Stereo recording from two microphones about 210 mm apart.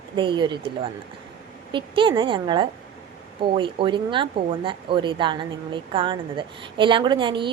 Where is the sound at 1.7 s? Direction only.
25° right (ahead or behind).